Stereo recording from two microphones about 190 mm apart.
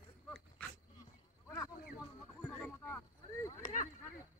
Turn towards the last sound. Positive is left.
turn(degrees=15)  # may be behind; listen again after turning